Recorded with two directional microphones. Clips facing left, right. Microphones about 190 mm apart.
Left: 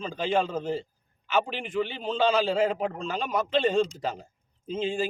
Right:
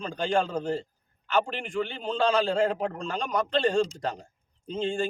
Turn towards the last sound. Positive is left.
turn(degrees=5)  # may be behind; listen again after turning